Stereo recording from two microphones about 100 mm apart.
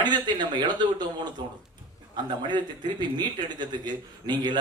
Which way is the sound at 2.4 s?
45° right (ahead or behind).